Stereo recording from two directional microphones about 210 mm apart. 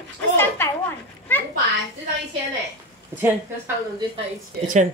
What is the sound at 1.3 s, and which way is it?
Children playing, 10° left (ahead or behind).